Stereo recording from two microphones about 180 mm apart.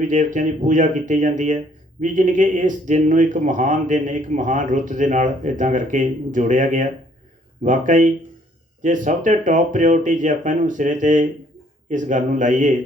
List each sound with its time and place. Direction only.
0.1 s speech: 45° right (ahead or behind)